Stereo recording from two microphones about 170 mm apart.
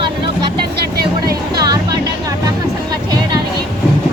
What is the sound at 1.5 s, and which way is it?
Music, 25° right (ahead or behind).